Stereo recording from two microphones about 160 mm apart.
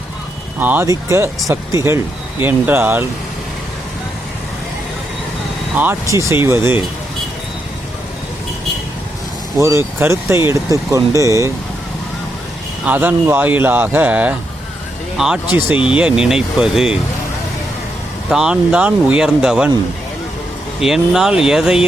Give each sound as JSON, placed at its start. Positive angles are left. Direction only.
{"t": 0.6, "sound": "speech", "side_deg": -10}
{"t": 5.7, "sound": "speech", "side_deg": -10}
{"t": 9.6, "sound": "speech", "side_deg": -15}
{"t": 12.8, "sound": "speech", "side_deg": -10}
{"t": 18.3, "sound": "speech", "side_deg": -5}
{"t": 20.8, "sound": "speech", "side_deg": 0}